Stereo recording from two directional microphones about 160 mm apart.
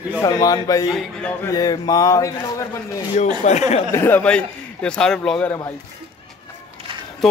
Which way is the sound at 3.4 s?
45° left (ahead or behind).